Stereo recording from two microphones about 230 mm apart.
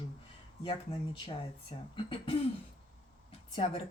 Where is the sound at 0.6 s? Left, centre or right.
Left.